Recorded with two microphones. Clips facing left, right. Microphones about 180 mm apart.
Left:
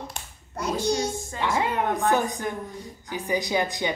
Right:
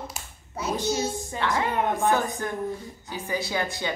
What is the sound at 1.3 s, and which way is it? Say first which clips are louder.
Speech: even; 15° left (ahead or behind).